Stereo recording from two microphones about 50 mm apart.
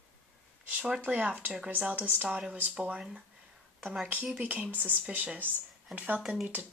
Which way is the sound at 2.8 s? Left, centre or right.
Right.